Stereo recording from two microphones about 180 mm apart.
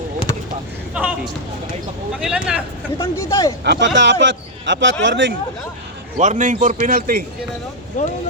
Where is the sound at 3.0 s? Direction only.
15° left (ahead or behind).